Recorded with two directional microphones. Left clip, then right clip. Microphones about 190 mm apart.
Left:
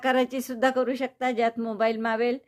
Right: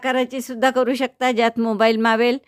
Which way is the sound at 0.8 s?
40° right (ahead or behind).